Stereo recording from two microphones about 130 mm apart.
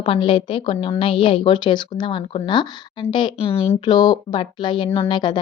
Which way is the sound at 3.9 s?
30° left (ahead or behind).